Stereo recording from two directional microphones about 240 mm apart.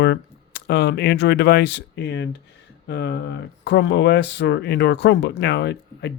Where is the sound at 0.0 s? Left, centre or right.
Left.